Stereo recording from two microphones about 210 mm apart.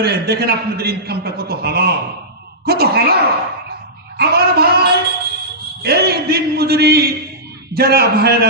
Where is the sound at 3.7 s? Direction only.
50° right (ahead or behind).